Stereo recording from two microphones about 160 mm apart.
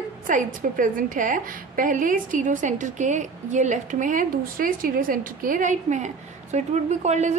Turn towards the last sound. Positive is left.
turn(degrees=-45)  # may be behind; listen again after turning